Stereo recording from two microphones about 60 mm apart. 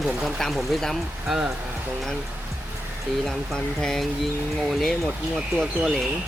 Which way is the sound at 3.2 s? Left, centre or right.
Centre.